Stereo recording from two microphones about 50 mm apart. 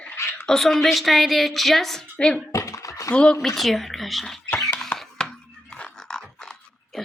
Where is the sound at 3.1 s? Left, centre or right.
Left.